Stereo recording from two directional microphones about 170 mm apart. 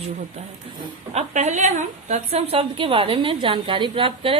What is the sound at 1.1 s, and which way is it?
A woman's voice, 45° right (ahead or behind).